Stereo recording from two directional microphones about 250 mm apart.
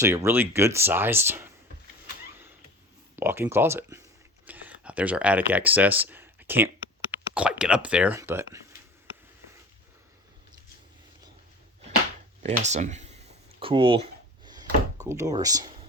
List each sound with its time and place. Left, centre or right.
0.0 s speech: centre
3.2 s speech: centre
12.4 s a sound: right